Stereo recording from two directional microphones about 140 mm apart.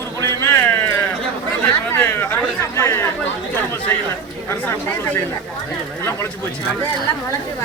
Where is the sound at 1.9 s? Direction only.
20° left (ahead or behind).